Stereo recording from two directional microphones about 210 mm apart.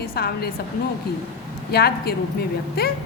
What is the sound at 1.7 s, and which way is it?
A woman's voice, 50° left (ahead or behind).